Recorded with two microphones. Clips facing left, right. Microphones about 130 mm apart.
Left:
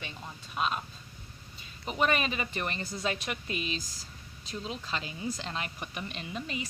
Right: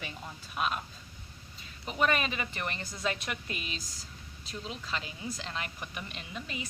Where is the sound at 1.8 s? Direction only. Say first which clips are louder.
Left 1 dB; 20° left (ahead or behind).